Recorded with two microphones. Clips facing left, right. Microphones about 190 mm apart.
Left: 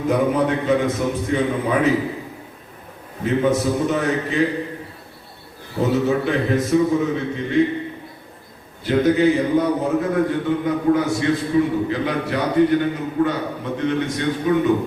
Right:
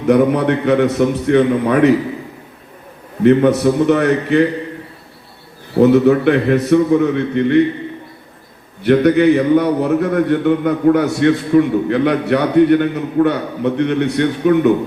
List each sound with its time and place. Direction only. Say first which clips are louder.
0.1 s a man's voice: right 7 dB; 70° right (ahead or behind)
3.2 s a man's voice: right 8 dB; 65° right (ahead or behind)
5.7 s a man's voice: right 9 dB; 65° right (ahead or behind)
8.8 s a man's voice: right 5 dB; 65° right (ahead or behind)